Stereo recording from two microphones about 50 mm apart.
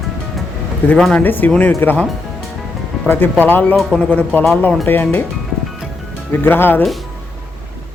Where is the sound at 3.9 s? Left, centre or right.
Left.